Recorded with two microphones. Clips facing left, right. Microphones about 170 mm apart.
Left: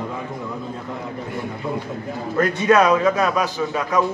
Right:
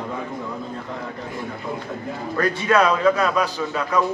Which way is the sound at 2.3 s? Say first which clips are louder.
Left 3 dB; 20° left (ahead or behind).